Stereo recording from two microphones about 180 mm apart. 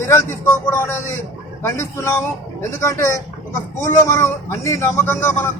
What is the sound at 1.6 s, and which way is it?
Speech, 15° left (ahead or behind).